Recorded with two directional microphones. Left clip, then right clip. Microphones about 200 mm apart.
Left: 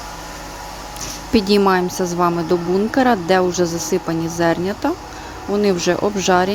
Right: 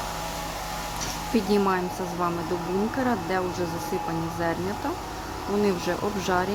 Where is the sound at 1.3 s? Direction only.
40° left (ahead or behind).